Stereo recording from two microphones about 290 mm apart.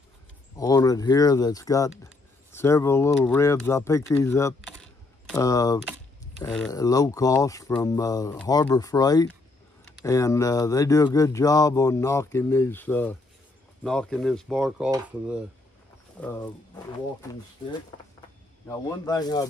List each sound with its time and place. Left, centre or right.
0.6 s speech: centre
18.7 s speech: centre